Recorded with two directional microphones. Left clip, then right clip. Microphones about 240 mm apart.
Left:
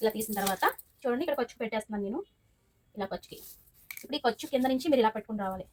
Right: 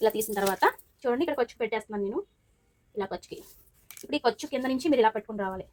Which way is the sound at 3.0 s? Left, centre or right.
Right.